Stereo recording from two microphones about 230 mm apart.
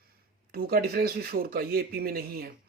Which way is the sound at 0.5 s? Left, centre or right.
Right.